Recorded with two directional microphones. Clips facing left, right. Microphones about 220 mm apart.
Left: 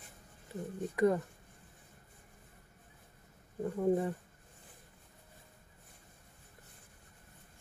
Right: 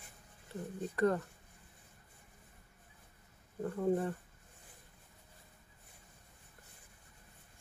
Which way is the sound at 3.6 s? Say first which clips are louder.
Left 2 dB; 10° left (ahead or behind).